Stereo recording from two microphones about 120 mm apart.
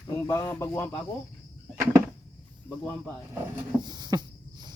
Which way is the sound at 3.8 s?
35° right (ahead or behind).